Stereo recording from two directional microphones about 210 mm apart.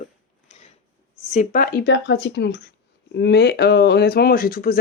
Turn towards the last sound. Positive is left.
turn(degrees=45)  # may be behind; listen again after turning